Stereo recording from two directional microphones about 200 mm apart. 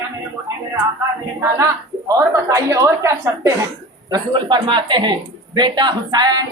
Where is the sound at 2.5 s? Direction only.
15° right (ahead or behind).